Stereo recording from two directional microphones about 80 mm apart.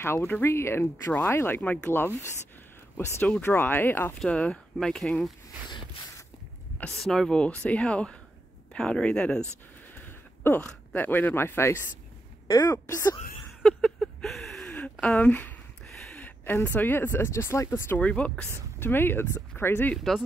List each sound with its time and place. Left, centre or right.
0.0 s speech: left
3.0 s speech: left; by 5.3 s centre
7.0 s speech: centre
9.9 s a sound: left
10.6 s speech: left
12.4 s speech: left
13.6 s a sound: centre
14.7 s a sound: centre
15.1 s speech: left
16.2 s a sound: left
16.7 s speech: left
17.9 s speech: centre
18.5 s speech: left